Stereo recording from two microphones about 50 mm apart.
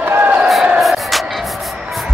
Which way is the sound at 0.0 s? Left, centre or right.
Right.